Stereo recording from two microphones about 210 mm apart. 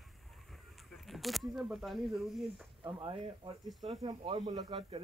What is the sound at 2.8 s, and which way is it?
Speech, 25° right (ahead or behind).